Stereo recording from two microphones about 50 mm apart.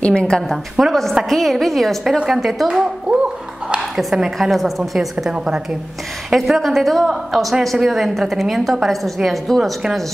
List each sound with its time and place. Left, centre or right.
0.0 s a woman's voice: centre
0.5 s a woman's voice: centre
3.9 s a woman's voice: centre
5.3 s a woman's voice: centre
6.3 s a woman's voice: centre